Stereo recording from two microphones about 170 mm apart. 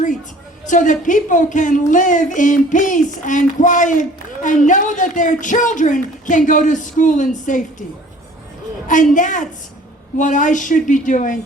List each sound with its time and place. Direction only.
0.6 s speech: 50° left (ahead or behind)
8.9 s speech: 50° left (ahead or behind)